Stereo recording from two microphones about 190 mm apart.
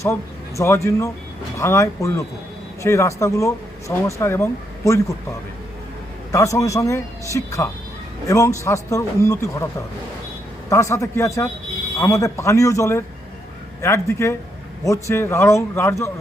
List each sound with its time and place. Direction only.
0.0 s speech: 15° left (ahead or behind)
6.3 s speech: 15° left (ahead or behind)
10.7 s speech: 15° left (ahead or behind)